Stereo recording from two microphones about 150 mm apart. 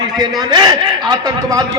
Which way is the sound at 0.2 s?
30° right (ahead or behind).